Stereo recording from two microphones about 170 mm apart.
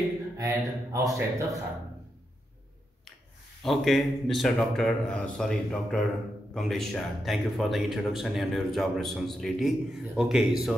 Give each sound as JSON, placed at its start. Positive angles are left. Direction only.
{"t": 0.4, "sound": "speech", "side_deg": -20}
{"t": 3.6, "sound": "speech", "side_deg": 0}